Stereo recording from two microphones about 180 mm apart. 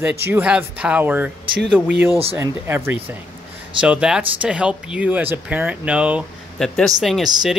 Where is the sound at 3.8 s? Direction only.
5° right (ahead or behind).